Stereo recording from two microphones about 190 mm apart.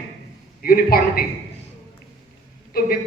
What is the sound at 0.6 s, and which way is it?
Speech, 50° left (ahead or behind).